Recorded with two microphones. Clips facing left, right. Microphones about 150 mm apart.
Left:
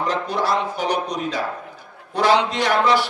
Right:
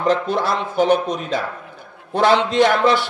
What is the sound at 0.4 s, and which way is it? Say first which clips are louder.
Mantra: right 3 dB; 25° right (ahead or behind).